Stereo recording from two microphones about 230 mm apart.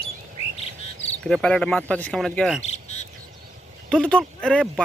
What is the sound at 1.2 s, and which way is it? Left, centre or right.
Speech, centre.